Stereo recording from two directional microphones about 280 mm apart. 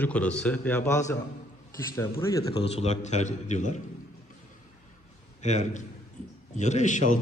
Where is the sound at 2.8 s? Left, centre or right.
Left.